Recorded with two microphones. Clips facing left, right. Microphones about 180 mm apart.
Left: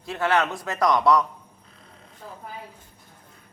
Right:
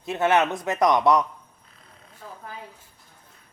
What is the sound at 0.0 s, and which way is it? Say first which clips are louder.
A man's voice: right 2 dB; 20° right (ahead or behind).